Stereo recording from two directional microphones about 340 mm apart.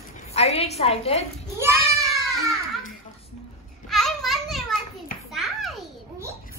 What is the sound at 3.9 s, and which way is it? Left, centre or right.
Children playing, centre.